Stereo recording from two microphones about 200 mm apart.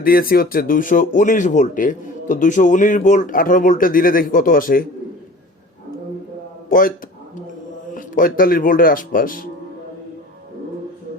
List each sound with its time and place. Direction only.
0.0 s speech: 45° left (ahead or behind)
6.7 s speech: 45° left (ahead or behind)
7.9 s speech: 45° left (ahead or behind)